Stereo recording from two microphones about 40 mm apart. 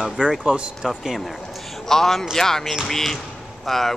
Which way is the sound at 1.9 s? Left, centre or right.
Centre.